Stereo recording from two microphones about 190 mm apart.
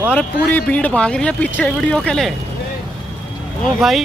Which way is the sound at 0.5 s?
10° left (ahead or behind).